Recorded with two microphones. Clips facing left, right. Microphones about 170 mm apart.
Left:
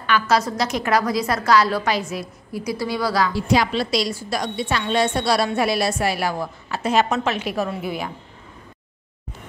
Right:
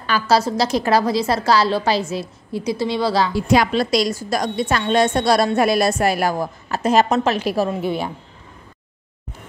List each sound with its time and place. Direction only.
0.0 s a woman's voice: 35° right (ahead or behind)
3.3 s a woman's voice: 50° right (ahead or behind); by 8.1 s 30° right (ahead or behind)